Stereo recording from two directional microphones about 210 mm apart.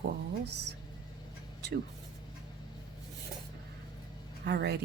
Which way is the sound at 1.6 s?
50° right (ahead or behind).